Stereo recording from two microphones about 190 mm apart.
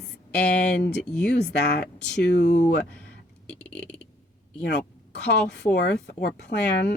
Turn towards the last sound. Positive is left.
turn(degrees=60)  # may be behind; listen again after turning